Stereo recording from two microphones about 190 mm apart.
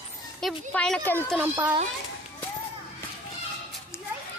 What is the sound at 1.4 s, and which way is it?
Speech, 15° right (ahead or behind).